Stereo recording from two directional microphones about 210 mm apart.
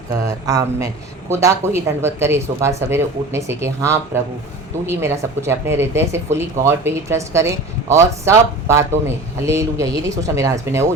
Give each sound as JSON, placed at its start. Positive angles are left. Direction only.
{"t": 0.3, "sound": "speech", "side_deg": -15}
{"t": 4.9, "sound": "speech", "side_deg": -10}